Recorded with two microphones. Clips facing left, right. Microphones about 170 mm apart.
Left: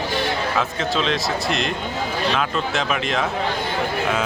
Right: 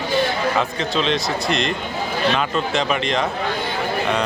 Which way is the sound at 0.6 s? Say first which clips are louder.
Right 1 dB; centre (ahead or behind).